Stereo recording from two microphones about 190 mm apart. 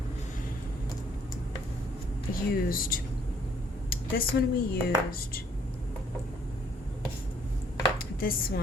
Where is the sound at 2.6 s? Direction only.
50° left (ahead or behind).